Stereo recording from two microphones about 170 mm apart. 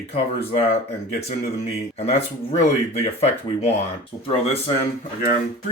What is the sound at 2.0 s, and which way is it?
Speech, 40° left (ahead or behind).